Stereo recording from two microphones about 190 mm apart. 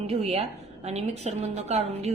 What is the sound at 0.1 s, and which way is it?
A woman's voice, 35° right (ahead or behind).